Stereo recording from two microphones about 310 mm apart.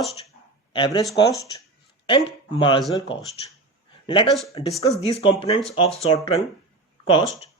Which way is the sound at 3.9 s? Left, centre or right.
Centre.